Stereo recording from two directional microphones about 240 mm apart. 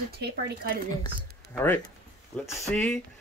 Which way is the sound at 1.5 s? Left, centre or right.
Centre.